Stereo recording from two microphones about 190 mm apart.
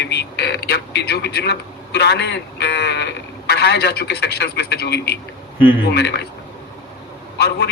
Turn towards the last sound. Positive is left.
turn(degrees=60)  # may be behind; listen again after turning